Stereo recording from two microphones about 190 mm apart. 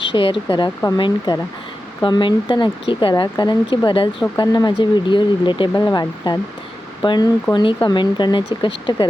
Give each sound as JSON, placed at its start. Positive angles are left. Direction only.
{"t": 0.0, "sound": "speech", "side_deg": 25}